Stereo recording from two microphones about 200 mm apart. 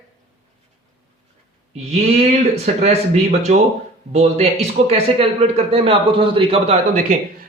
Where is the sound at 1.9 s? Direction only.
30° right (ahead or behind).